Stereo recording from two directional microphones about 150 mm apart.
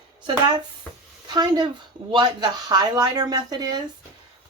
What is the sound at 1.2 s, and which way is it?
Speech, 30° right (ahead or behind).